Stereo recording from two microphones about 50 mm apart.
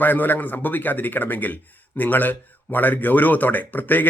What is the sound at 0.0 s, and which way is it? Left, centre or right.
A man's voice, left.